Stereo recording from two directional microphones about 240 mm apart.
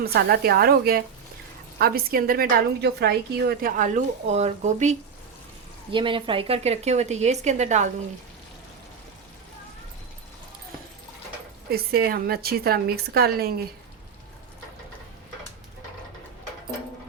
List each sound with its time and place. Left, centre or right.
0.0 s a woman's voice: right
11.7 s a woman's voice: right